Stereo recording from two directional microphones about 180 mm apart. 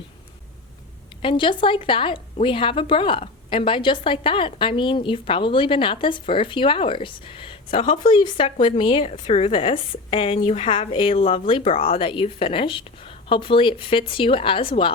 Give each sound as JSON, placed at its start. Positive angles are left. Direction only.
{"t": 1.2, "sound": "a woman's voice", "side_deg": 30}